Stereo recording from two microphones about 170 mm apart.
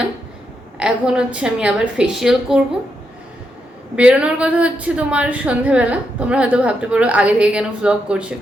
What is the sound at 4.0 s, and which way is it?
A woman's voice, 5° right (ahead or behind).